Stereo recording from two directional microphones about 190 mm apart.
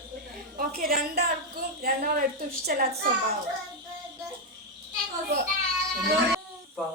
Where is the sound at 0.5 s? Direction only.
50° right (ahead or behind).